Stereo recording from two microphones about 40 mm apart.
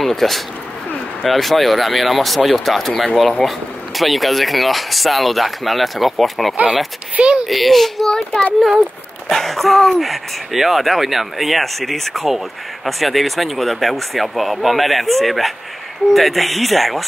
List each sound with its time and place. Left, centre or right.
0.0 s speech: centre
7.2 s speech: right
7.4 s speech: centre